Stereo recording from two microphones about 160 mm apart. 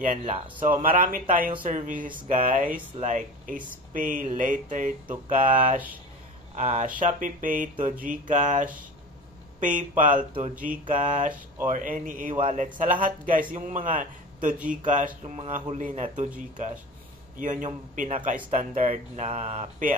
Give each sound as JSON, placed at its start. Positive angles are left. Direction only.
{"t": 0.3, "sound": "a man's voice", "side_deg": -55}
{"t": 19.2, "sound": "speech", "side_deg": -40}